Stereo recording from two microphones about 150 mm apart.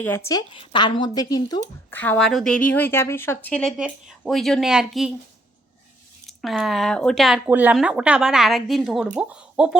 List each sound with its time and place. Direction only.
0.3 s speech: 25° left (ahead or behind)
1.9 s a woman's voice: 10° left (ahead or behind)
6.2 s a woman's voice: centre (ahead or behind)
7.4 s a woman's voice: 10° right (ahead or behind)